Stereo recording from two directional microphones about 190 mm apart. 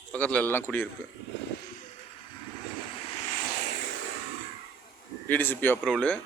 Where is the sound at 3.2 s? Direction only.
45° left (ahead or behind); by 3.8 s 60° left (ahead or behind).